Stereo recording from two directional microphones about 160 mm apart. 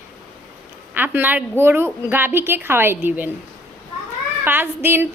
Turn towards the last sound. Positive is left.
turn(degrees=-15)  # may be behind; listen again after turning